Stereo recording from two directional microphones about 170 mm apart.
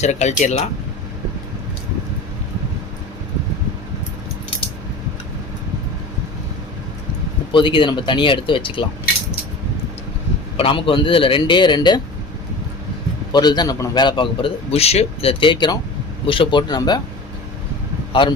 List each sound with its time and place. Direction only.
0.0 s speech: 40° left (ahead or behind)
7.5 s a man's voice: 30° left (ahead or behind)
10.6 s a man's voice: 30° left (ahead or behind)
13.3 s a man's voice: 25° left (ahead or behind)
18.1 s speech: 30° left (ahead or behind)